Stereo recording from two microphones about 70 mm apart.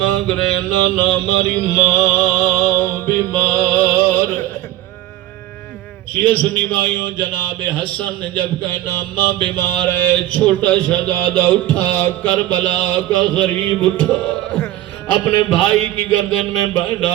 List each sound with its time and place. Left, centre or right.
0.0 s mantra: centre
0.9 s a man's voice: left
1.6 s music: left
6.1 s a man's voice: left
15.2 s mantra: left
15.5 s a man's voice: left
16.5 s mantra: left